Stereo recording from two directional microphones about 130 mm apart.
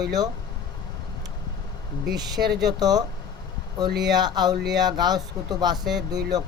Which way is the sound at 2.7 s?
30° right (ahead or behind).